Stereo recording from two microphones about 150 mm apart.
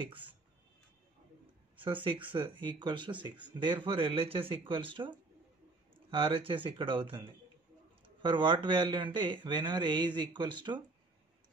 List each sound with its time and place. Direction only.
0.0 s speech: 35° right (ahead or behind)
2.3 s speech: 35° right (ahead or behind)